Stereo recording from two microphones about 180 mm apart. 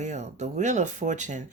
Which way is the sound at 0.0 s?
40° right (ahead or behind).